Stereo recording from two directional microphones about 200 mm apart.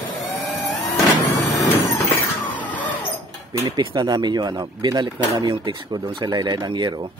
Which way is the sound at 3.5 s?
20° right (ahead or behind).